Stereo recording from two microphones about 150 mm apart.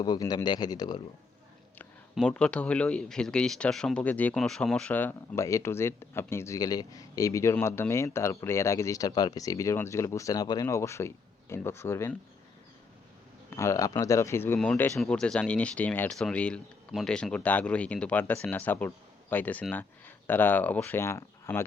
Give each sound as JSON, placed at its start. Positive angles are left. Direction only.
{"t": 0.0, "sound": "speech", "side_deg": 25}
{"t": 2.1, "sound": "speech", "side_deg": 5}
{"t": 13.5, "sound": "speech", "side_deg": 20}